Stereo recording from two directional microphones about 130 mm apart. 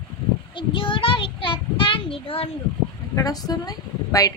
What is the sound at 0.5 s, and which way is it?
A child's voice, 40° left (ahead or behind).